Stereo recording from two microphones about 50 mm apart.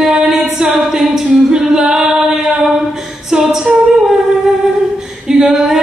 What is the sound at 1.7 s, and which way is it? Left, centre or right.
Singing, centre.